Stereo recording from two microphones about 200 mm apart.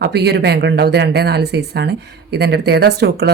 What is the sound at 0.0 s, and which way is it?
Speech, 55° right (ahead or behind).